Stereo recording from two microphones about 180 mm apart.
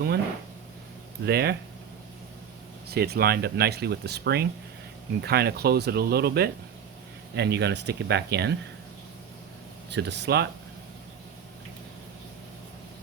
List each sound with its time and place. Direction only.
1.2 s speech: 60° right (ahead or behind)
2.9 s speech: 60° right (ahead or behind)
9.9 s speech: 75° right (ahead or behind)